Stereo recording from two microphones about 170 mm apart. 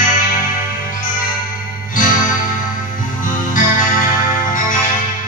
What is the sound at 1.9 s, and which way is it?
Music, 50° left (ahead or behind).